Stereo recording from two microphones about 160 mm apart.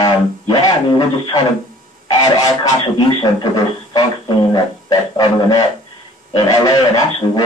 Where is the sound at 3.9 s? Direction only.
25° left (ahead or behind).